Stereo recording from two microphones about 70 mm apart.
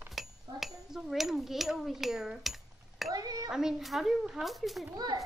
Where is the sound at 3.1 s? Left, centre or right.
Right.